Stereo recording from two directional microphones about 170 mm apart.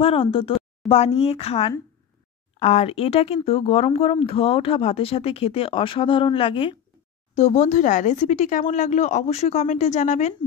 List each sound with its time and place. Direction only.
0.0 s speech: 35° left (ahead or behind)
7.3 s speech: 45° left (ahead or behind)